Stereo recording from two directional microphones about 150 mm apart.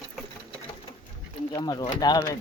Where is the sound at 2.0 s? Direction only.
25° left (ahead or behind).